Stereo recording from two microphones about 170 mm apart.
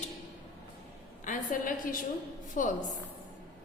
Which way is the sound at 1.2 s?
50° left (ahead or behind).